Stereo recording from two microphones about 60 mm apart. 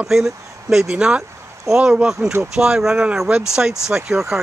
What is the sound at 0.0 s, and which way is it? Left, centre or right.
Speech, centre.